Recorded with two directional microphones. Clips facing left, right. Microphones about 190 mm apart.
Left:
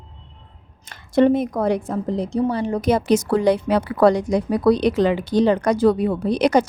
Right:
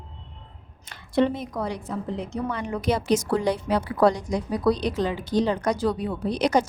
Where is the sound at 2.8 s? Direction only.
55° left (ahead or behind).